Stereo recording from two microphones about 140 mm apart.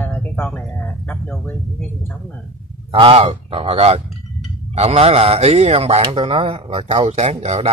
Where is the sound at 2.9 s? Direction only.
40° right (ahead or behind).